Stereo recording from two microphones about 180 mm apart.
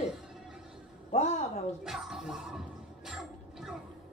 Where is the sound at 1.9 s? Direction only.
5° right (ahead or behind).